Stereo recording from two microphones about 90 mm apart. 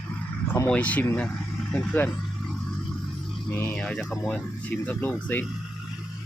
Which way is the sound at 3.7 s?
10° left (ahead or behind).